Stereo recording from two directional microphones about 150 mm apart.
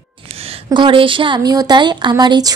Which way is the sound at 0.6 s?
35° right (ahead or behind).